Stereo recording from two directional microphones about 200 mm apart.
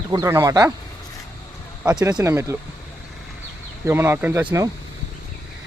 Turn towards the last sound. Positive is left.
turn(degrees=-15)  # may be behind; listen again after turning